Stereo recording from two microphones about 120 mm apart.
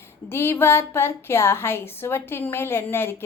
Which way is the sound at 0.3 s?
20° left (ahead or behind).